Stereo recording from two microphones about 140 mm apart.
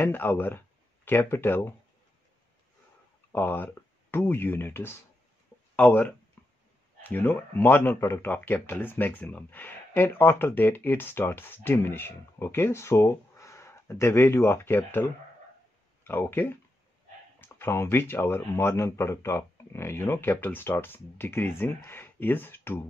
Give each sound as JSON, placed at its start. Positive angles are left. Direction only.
{"t": 0.0, "sound": "speech", "side_deg": 15}
{"t": 3.3, "sound": "speech", "side_deg": 15}
{"t": 6.4, "sound": "a sound", "side_deg": 10}
{"t": 7.0, "sound": "speech", "side_deg": 15}